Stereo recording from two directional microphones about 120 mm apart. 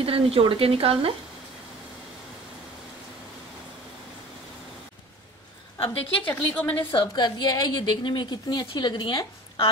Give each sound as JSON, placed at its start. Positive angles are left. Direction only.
{"t": 0.0, "sound": "speech", "side_deg": -50}
{"t": 5.8, "sound": "a woman's voice", "side_deg": 15}
{"t": 6.9, "sound": "a woman's voice", "side_deg": 40}